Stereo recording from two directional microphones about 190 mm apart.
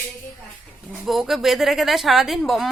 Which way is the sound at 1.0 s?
Centre (ahead or behind).